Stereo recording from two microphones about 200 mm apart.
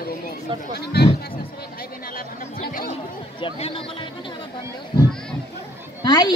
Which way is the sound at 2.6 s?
45° left (ahead or behind).